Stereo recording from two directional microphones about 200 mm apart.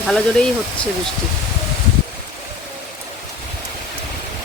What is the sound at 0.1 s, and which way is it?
Speech, 5° left (ahead or behind).